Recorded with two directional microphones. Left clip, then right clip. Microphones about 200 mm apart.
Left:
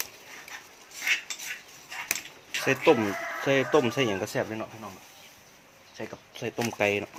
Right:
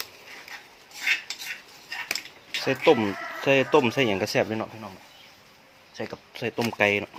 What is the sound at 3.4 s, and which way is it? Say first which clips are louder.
Speech: right 4 dB; 25° right (ahead or behind).